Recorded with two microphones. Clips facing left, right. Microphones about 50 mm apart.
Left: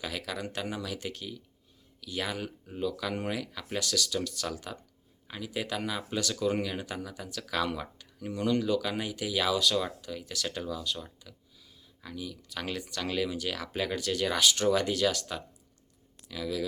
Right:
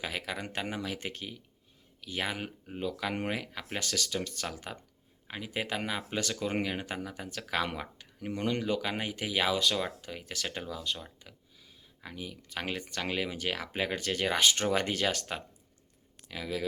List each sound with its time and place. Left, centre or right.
0.0 s speech: right